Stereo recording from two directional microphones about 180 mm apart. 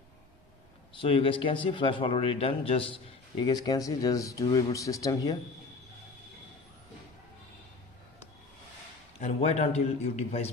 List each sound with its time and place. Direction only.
0.9 s a man's voice: 30° left (ahead or behind)
9.2 s a man's voice: 35° left (ahead or behind)